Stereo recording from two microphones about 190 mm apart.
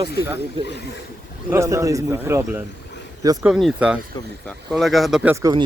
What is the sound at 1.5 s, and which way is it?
A man's voice, 15° right (ahead or behind).